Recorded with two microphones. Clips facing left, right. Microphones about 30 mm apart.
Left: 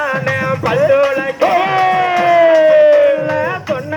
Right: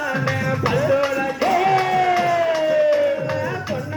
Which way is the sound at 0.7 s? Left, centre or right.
Left.